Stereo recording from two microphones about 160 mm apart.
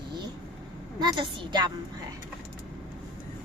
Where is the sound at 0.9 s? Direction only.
25° right (ahead or behind).